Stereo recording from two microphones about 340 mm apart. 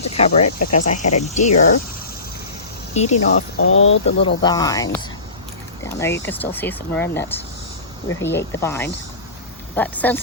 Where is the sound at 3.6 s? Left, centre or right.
Left.